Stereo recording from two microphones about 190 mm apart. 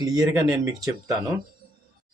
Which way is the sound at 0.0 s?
20° right (ahead or behind).